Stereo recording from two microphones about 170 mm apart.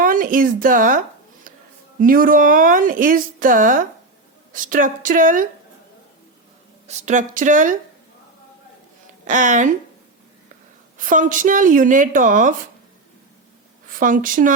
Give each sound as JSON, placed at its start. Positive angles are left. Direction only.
{"t": 0.0, "sound": "a woman's voice", "side_deg": -55}
{"t": 6.8, "sound": "a woman's voice", "side_deg": -45}
{"t": 9.2, "sound": "a woman's voice", "side_deg": -45}
{"t": 10.9, "sound": "a woman's voice", "side_deg": -50}
{"t": 13.8, "sound": "a woman's voice", "side_deg": -50}